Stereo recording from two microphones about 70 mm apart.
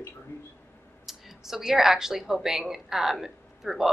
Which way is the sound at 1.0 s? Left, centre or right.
Centre.